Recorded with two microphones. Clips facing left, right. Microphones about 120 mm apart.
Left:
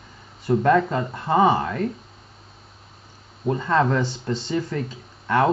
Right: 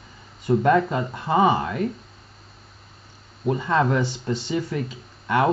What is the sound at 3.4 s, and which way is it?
Speech, 10° right (ahead or behind).